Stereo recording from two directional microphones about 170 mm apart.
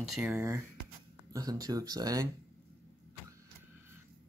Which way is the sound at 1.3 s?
20° right (ahead or behind).